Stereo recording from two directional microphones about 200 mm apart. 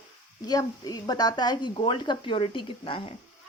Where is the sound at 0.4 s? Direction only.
20° left (ahead or behind).